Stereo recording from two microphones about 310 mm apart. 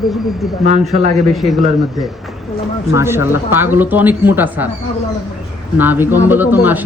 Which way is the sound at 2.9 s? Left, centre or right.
Centre.